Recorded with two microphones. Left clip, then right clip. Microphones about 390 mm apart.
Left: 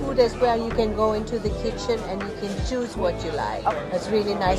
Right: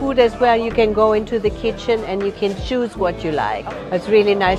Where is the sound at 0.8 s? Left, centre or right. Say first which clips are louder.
Right 8 dB; right.